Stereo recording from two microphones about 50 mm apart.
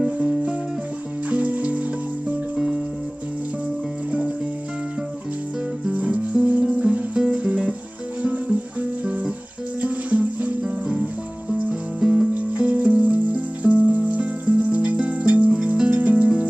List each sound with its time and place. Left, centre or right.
0.0 s music: centre
1.3 s music: right
2.5 s music: centre
5.9 s music: right
9.8 s music: right
10.6 s music: centre
12.5 s music: right